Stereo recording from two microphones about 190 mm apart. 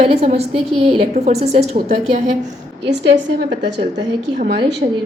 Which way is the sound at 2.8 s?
65° right (ahead or behind).